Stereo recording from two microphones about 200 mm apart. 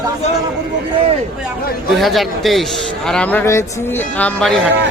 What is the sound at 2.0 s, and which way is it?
A man's voice, centre (ahead or behind).